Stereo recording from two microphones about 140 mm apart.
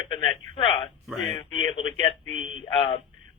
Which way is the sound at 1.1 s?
Centre (ahead or behind).